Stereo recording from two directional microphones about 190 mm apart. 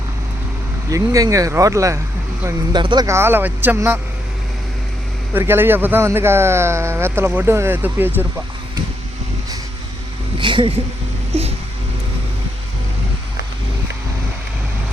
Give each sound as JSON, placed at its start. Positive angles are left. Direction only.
{"t": 0.9, "sound": "a man's voice", "side_deg": -15}
{"t": 5.3, "sound": "a man's voice", "side_deg": -10}
{"t": 10.3, "sound": "a sound", "side_deg": -25}